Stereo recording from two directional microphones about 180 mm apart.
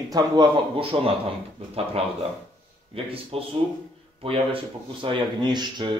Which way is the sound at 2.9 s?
30° right (ahead or behind).